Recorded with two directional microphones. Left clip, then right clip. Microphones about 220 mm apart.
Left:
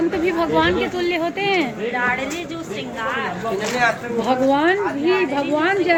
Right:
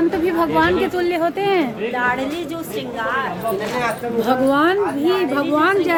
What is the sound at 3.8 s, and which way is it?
A woman's voice, 15° right (ahead or behind).